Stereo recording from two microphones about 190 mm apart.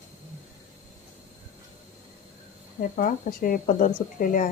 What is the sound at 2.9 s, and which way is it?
Speech, 45° left (ahead or behind).